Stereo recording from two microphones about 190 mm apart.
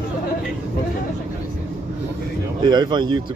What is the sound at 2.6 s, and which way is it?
Speech, 20° right (ahead or behind).